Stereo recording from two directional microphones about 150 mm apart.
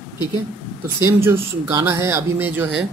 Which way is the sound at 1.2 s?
20° right (ahead or behind).